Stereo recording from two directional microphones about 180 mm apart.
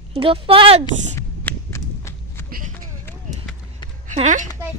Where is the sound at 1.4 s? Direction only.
10° left (ahead or behind).